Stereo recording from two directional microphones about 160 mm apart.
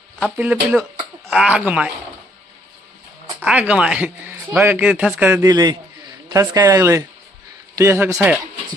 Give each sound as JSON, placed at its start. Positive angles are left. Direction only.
{"t": 0.3, "sound": "speech", "side_deg": -10}
{"t": 3.4, "sound": "speech", "side_deg": -10}
{"t": 5.4, "sound": "speech", "side_deg": -20}